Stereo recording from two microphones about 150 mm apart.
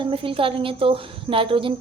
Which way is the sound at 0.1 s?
35° right (ahead or behind).